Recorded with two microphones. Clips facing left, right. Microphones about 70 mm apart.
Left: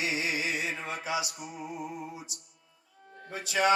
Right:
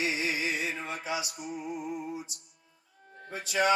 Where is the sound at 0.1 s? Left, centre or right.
Left.